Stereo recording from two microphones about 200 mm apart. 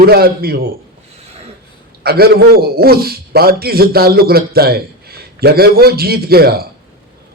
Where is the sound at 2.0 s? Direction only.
50° right (ahead or behind).